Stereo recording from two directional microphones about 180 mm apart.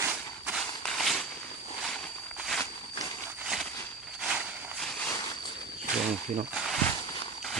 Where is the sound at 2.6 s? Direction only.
20° left (ahead or behind).